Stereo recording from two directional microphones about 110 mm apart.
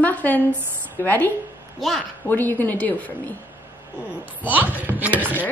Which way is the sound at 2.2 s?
15° left (ahead or behind).